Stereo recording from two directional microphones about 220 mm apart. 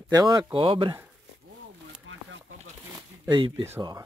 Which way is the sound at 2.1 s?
60° right (ahead or behind).